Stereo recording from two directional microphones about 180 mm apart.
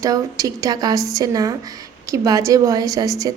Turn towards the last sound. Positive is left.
turn(degrees=-20)  # may be behind; listen again after turning